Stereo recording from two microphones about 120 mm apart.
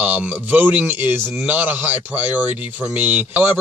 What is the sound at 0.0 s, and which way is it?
Speech, 10° right (ahead or behind).